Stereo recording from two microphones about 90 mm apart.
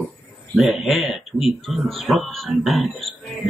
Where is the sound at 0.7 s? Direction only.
Centre (ahead or behind).